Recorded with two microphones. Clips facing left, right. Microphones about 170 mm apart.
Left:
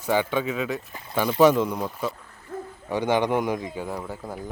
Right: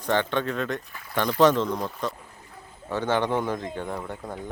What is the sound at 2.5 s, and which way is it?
Hoot, 45° left (ahead or behind).